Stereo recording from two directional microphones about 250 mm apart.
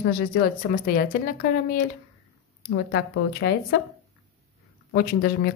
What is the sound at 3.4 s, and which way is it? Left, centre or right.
Speech, left.